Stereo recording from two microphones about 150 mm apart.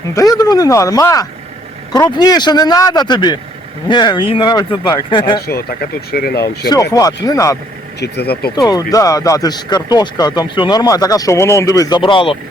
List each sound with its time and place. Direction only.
0.1 s speech: 20° left (ahead or behind)
5.5 s speech: 90° left
6.9 s speech: 25° left (ahead or behind)
8.0 s speech: 90° left
8.5 s speech: 25° left (ahead or behind)